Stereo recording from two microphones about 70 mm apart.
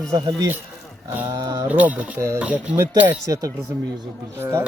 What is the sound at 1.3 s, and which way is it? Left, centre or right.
Speech, right.